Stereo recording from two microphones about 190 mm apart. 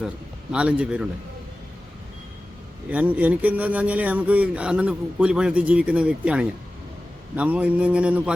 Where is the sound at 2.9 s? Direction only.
10° right (ahead or behind).